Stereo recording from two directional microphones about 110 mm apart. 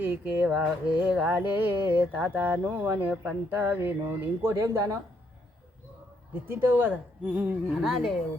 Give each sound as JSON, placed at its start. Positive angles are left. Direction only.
{"t": 0.0, "sound": "speech", "side_deg": -15}
{"t": 1.3, "sound": "speech", "side_deg": -15}
{"t": 6.5, "sound": "speech", "side_deg": -20}
{"t": 7.8, "sound": "speech", "side_deg": 0}